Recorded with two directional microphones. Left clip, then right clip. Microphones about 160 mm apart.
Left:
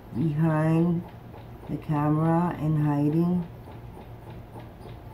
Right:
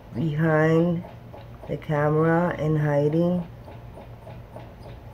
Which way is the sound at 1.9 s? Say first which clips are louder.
Right 4 dB; 15° right (ahead or behind).